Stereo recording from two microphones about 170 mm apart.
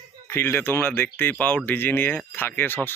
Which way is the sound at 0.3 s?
15° left (ahead or behind).